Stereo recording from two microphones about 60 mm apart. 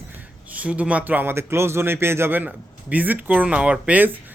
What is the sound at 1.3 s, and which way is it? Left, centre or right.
Speech, right.